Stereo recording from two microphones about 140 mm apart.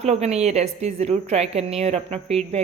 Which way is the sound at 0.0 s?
50° right (ahead or behind).